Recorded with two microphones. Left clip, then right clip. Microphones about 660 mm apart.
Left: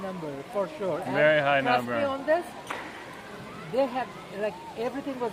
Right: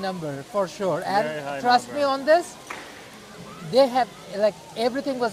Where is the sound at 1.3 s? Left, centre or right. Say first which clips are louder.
Left 8 dB; centre.